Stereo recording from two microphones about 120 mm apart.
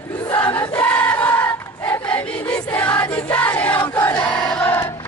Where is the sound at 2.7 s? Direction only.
10° left (ahead or behind).